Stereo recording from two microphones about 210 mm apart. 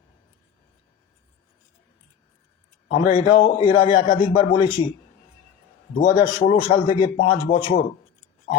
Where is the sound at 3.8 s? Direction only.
35° left (ahead or behind).